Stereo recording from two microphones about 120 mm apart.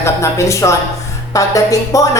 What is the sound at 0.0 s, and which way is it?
Speech, 25° left (ahead or behind).